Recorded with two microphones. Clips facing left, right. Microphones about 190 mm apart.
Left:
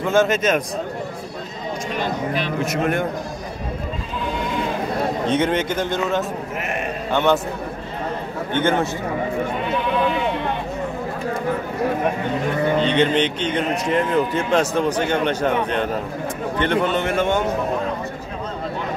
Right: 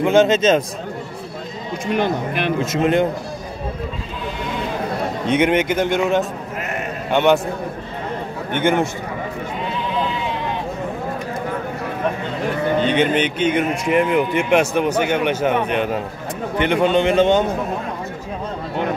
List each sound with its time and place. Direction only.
0.0 s a man's voice: 20° right (ahead or behind)
2.0 s speech: 55° right (ahead or behind)
2.6 s a man's voice: 25° right (ahead or behind)
5.2 s a man's voice: 15° right (ahead or behind)
8.5 s speech: 15° right (ahead or behind)
9.7 s sheep: 60° left (ahead or behind)
12.8 s speech: 10° right (ahead or behind)